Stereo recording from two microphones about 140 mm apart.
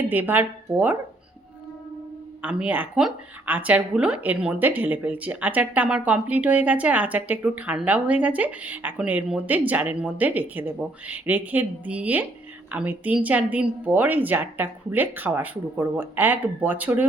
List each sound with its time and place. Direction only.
0.1 s a woman's voice: 15° right (ahead or behind)
2.4 s a woman's voice: 10° right (ahead or behind)